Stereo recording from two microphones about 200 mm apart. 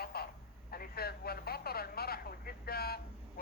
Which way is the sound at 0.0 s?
50° left (ahead or behind).